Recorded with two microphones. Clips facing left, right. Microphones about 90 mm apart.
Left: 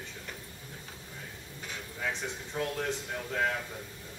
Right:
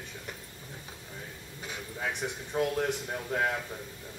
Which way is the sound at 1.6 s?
15° right (ahead or behind).